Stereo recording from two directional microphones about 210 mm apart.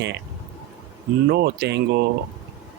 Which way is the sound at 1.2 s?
50° right (ahead or behind).